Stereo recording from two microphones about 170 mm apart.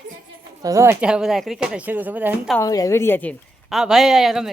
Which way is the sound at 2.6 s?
20° left (ahead or behind).